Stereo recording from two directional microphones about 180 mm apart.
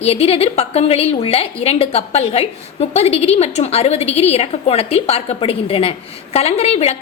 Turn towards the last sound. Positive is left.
turn(degrees=35)  # may be behind; listen again after turning